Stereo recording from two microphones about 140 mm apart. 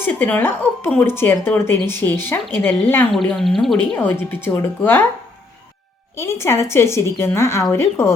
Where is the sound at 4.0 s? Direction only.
15° left (ahead or behind).